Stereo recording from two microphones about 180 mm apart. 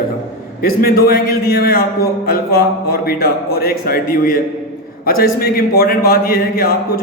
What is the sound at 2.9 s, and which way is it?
A man's voice, 55° left (ahead or behind).